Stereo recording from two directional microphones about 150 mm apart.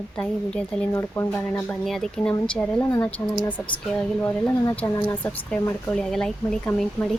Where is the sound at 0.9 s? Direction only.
20° left (ahead or behind).